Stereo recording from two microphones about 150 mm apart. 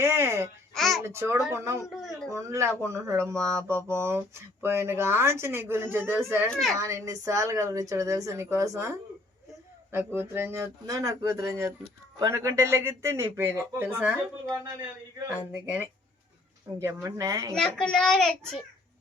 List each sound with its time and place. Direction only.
0.0 s babbling: 15° right (ahead or behind)
0.7 s a sound: centre (ahead or behind)
1.0 s a woman's voice: 15° right (ahead or behind)
3.3 s mantra: 10° left (ahead or behind)
3.8 s speech: 15° right (ahead or behind)
6.5 s a child's voice: centre (ahead or behind)
6.7 s a woman's voice: 20° right (ahead or behind)
16.8 s a woman's voice: 20° right (ahead or behind)
17.5 s a child's voice: 5° left (ahead or behind)